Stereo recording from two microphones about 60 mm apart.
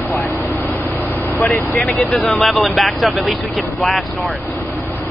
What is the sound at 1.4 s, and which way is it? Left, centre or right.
Speech, left.